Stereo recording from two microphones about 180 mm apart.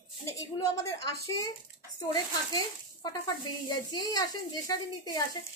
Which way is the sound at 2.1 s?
25° left (ahead or behind).